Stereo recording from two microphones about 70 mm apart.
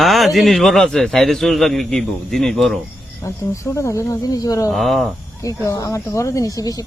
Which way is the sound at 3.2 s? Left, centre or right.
Left.